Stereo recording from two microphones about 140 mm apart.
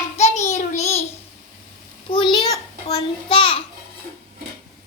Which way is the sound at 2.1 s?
35° left (ahead or behind).